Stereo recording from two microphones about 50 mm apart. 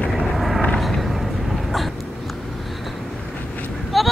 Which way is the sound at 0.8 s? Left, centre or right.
Centre.